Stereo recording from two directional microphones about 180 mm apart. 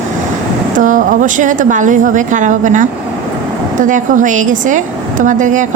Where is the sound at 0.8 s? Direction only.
45° right (ahead or behind).